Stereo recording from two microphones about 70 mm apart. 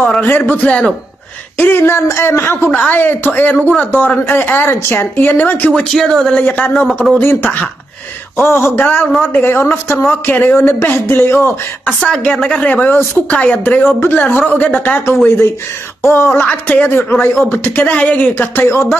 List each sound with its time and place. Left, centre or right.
0.1 s a woman's voice: left
1.6 s speech: left
5.7 s a woman's voice: centre
6.4 s speech: left
8.4 s speech: left
8.8 s speech: left
11.8 s a woman's voice: centre
13.9 s speech: left
14.6 s speech: centre
16.0 s speech: left
18.7 s speech: left